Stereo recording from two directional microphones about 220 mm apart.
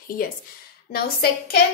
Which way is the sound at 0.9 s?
45° left (ahead or behind).